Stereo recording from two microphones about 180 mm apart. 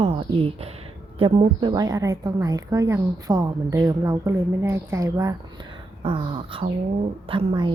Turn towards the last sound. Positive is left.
turn(degrees=-25)  # may be behind; listen again after turning